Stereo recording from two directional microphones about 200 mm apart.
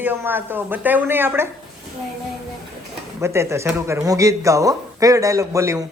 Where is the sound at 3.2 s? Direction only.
15° right (ahead or behind).